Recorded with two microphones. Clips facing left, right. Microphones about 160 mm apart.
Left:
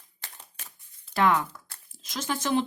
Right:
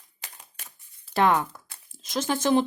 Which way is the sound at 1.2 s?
30° right (ahead or behind).